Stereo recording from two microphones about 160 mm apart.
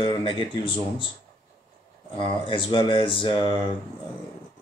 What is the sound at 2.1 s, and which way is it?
Speech, 30° left (ahead or behind).